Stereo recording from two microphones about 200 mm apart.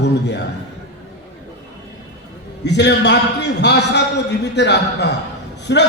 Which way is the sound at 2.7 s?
60° left (ahead or behind).